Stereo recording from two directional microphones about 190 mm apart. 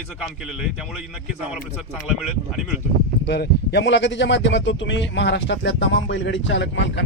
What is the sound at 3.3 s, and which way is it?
Speech, 65° left (ahead or behind).